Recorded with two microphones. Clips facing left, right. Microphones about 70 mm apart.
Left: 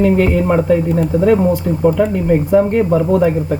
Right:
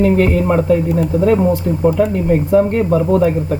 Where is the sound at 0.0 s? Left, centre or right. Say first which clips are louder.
Even; centre.